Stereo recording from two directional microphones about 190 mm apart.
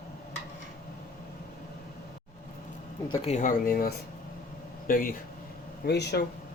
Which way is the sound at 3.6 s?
50° left (ahead or behind).